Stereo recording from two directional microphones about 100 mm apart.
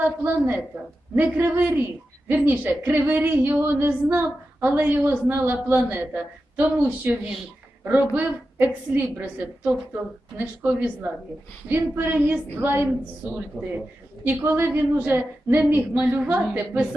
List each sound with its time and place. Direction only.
0.0 s a woman's voice: 15° right (ahead or behind)
14.3 s a man's voice: 25° right (ahead or behind)